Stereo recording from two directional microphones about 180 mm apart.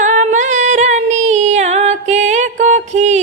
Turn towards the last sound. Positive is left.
turn(degrees=-40)  # may be behind; listen again after turning